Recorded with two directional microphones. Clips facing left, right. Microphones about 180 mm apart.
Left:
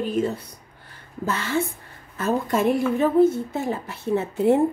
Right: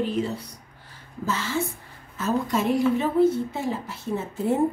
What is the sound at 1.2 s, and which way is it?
A woman's voice, 60° left (ahead or behind).